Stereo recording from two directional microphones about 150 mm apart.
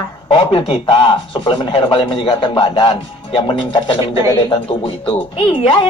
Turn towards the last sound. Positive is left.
turn(degrees=35)  # may be behind; listen again after turning